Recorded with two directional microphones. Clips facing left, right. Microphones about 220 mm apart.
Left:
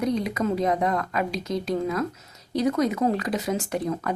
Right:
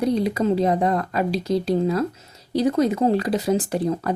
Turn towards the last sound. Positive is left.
turn(degrees=-35)  # may be behind; listen again after turning